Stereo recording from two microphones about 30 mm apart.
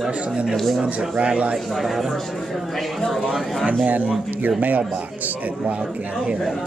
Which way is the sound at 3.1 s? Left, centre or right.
Centre.